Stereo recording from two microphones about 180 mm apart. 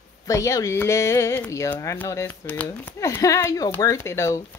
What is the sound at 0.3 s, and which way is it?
Speech, 20° left (ahead or behind).